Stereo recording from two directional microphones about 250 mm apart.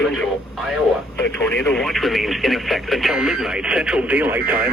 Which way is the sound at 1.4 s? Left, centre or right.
Centre.